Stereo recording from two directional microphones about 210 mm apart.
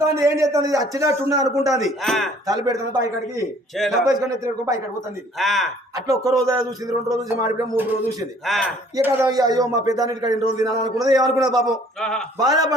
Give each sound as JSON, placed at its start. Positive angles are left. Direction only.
{"t": 0.0, "sound": "a man's voice", "side_deg": -15}
{"t": 1.8, "sound": "a man's voice", "side_deg": 0}
{"t": 2.5, "sound": "a man's voice", "side_deg": -15}
{"t": 3.8, "sound": "a man's voice", "side_deg": 0}
{"t": 4.4, "sound": "a man's voice", "side_deg": -15}
{"t": 5.4, "sound": "a man's voice", "side_deg": 0}
{"t": 5.9, "sound": "a man's voice", "side_deg": -15}
{"t": 8.4, "sound": "a man's voice", "side_deg": 0}
{"t": 9.0, "sound": "a man's voice", "side_deg": -10}
{"t": 11.6, "sound": "a man's voice", "side_deg": 5}
{"t": 12.4, "sound": "a man's voice", "side_deg": -15}